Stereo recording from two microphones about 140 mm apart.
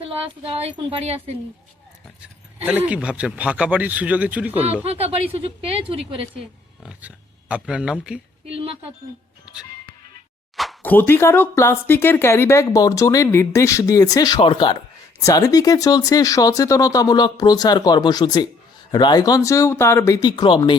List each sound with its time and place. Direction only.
0.0 s speech: 45° right (ahead or behind)
2.6 s speech: 10° right (ahead or behind)
4.9 s speech: 45° right (ahead or behind)
6.8 s speech: 10° right (ahead or behind)
8.4 s speech: 40° right (ahead or behind)
10.8 s speech: 15° left (ahead or behind); by 20.7 s 35° left (ahead or behind)